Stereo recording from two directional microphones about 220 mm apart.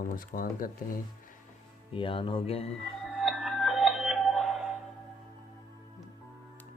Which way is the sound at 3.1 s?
Centre (ahead or behind).